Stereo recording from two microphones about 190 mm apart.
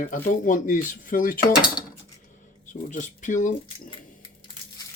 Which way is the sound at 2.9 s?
40° left (ahead or behind).